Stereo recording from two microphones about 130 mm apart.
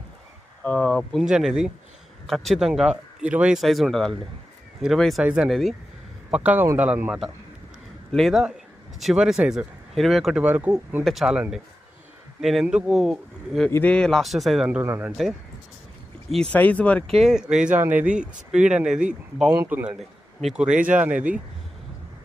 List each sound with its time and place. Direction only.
0.6 s speech: 10° left (ahead or behind)
1.2 s speech: 5° right (ahead or behind)
6.3 s speech: 10° right (ahead or behind)
11.0 s speech: centre (ahead or behind)
13.7 s speech: 20° left (ahead or behind)
13.9 s speech: 5° left (ahead or behind); by 15.1 s 15° right (ahead or behind)
16.5 s speech: 10° left (ahead or behind)
17.2 s speech: 5° right (ahead or behind)